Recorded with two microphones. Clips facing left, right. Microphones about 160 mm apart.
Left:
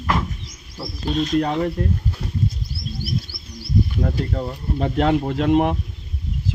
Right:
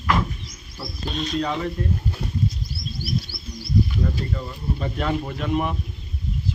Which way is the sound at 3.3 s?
30° right (ahead or behind).